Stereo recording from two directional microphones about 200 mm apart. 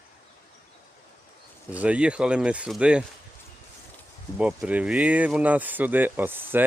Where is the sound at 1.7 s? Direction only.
5° right (ahead or behind).